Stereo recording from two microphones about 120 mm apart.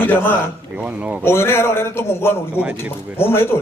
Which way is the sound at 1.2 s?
20° left (ahead or behind).